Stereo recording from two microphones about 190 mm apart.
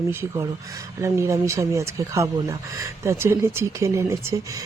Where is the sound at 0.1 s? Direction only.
10° right (ahead or behind).